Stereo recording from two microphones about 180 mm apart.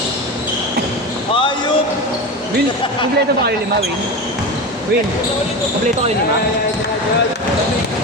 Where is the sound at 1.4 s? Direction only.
25° left (ahead or behind).